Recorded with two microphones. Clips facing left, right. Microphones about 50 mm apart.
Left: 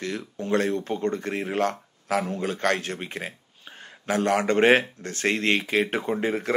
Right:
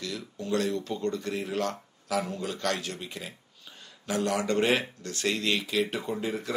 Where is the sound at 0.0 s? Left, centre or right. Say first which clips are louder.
Left 5 dB; left.